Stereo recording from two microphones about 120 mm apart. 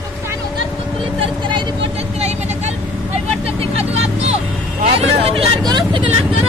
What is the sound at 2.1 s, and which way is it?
Vehicle, 65° right (ahead or behind).